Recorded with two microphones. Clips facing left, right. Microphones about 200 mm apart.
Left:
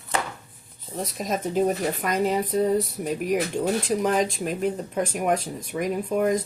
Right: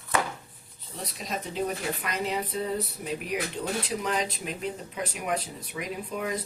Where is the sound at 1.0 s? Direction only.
45° left (ahead or behind).